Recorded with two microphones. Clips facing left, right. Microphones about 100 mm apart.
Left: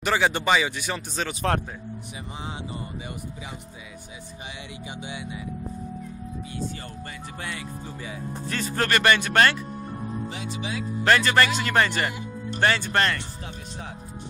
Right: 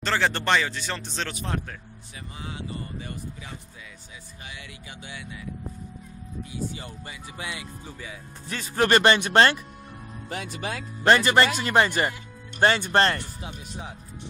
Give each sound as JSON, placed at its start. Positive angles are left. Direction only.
{"t": 0.0, "sound": "speech", "side_deg": 10}
{"t": 5.0, "sound": "speech", "side_deg": 20}
{"t": 7.3, "sound": "speech", "side_deg": -10}
{"t": 8.8, "sound": "speech", "side_deg": -25}
{"t": 10.3, "sound": "speech", "side_deg": -55}
{"t": 11.1, "sound": "speech", "side_deg": -20}